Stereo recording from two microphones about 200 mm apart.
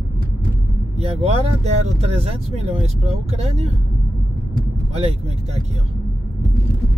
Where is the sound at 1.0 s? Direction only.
30° right (ahead or behind).